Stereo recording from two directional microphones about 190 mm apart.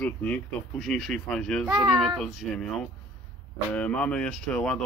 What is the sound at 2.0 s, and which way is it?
Speech, centre (ahead or behind).